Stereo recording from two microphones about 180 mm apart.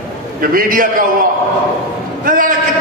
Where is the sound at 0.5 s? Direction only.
50° right (ahead or behind).